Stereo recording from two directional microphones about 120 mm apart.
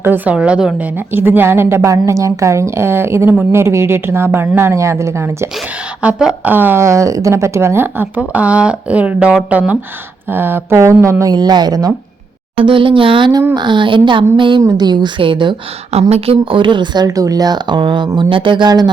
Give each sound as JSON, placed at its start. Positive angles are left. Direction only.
{"t": 0.0, "sound": "a woman's voice", "side_deg": -15}
{"t": 6.0, "sound": "a woman's voice", "side_deg": -10}
{"t": 12.5, "sound": "speech", "side_deg": -45}
{"t": 15.9, "sound": "speech", "side_deg": -60}